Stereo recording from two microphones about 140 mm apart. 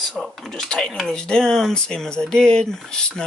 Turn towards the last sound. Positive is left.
turn(degrees=5)  # may be behind; listen again after turning